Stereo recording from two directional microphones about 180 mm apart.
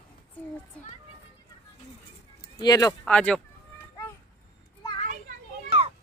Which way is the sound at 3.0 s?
5° left (ahead or behind).